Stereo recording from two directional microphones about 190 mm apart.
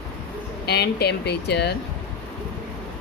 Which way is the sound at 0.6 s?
60° left (ahead or behind).